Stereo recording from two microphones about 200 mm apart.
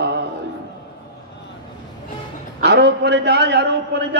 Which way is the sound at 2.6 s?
55° right (ahead or behind).